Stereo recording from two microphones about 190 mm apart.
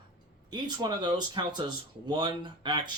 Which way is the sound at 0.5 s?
25° right (ahead or behind).